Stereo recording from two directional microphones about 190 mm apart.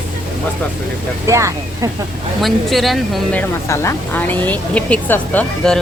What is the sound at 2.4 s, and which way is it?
Speech, centre (ahead or behind).